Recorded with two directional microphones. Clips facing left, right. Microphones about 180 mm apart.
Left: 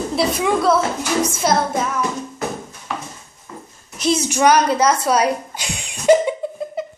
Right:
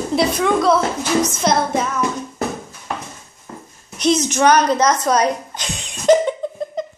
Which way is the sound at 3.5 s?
45° right (ahead or behind).